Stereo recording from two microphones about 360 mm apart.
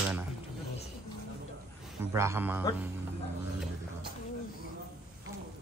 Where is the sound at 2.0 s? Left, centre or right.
Centre.